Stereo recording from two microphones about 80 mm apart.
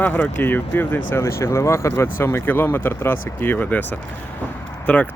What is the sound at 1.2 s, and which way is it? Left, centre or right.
Speech, left.